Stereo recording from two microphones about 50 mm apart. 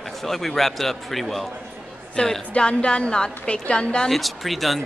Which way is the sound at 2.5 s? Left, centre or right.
Left.